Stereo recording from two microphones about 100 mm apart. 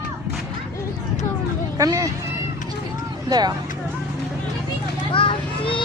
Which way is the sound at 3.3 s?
40° right (ahead or behind).